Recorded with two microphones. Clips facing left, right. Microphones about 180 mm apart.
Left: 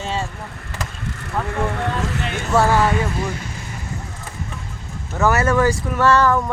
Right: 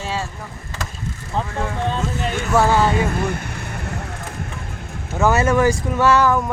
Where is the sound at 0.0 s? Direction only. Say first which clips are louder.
Left 1 dB; 5° right (ahead or behind).